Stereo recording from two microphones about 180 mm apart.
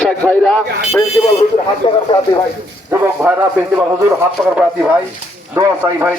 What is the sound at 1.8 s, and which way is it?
Speech, 35° left (ahead or behind).